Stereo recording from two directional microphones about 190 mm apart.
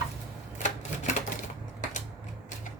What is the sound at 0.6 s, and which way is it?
Typewriter, 40° left (ahead or behind).